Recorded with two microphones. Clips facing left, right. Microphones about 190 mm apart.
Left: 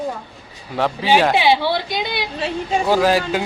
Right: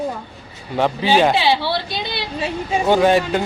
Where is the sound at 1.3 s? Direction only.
15° left (ahead or behind).